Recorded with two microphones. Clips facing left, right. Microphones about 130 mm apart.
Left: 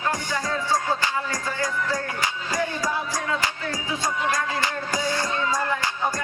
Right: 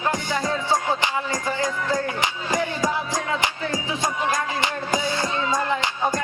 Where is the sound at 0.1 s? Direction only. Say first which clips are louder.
Right 3 dB; 20° right (ahead or behind).